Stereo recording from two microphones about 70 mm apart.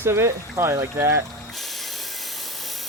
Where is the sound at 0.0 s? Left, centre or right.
Right.